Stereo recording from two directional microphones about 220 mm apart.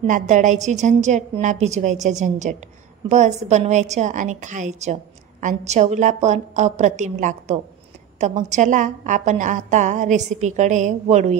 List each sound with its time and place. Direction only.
0.0 s a woman's voice: 35° right (ahead or behind)